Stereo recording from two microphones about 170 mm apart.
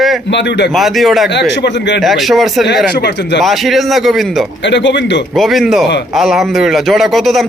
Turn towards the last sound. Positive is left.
turn(degrees=0)  # may be behind; listen again after turning